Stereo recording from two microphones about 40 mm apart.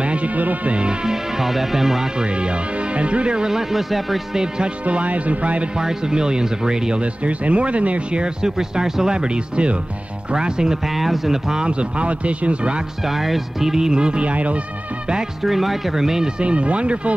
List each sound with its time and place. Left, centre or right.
0.0 s music: right
0.4 s speech: right
1.0 s speech: centre
2.1 s speech: right; by 4.4 s centre
4.8 s speech: right
5.8 s speech: centre
7.0 s speech: right
8.2 s speech: centre
11.0 s speech: centre
11.6 s speech: right
13.0 s speech: centre
14.2 s speech: right
15.4 s speech: centre
16.3 s speech: right